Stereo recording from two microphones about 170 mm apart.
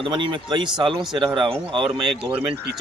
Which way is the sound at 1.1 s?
30° right (ahead or behind).